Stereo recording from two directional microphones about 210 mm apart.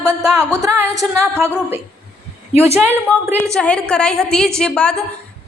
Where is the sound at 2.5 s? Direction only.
10° right (ahead or behind).